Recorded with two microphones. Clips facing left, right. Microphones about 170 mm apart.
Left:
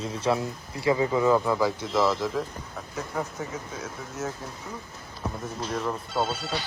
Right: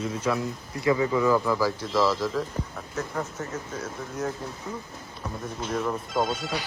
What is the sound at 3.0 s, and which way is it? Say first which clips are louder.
Speech: right 1 dB; 10° left (ahead or behind).